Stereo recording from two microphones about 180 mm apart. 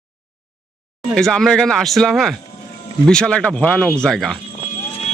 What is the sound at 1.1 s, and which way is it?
Speech, 5° left (ahead or behind).